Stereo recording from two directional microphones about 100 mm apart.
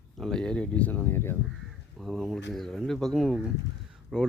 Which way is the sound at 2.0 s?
Centre (ahead or behind).